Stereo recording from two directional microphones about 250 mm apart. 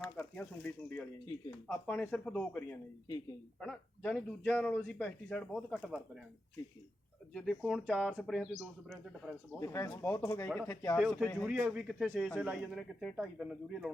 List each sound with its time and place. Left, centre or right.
0.0 s a man's voice: centre
7.3 s a man's voice: centre
9.6 s a man's voice: centre